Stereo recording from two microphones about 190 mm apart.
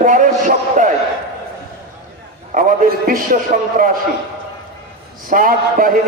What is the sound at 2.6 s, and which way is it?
A man's voice, 45° right (ahead or behind).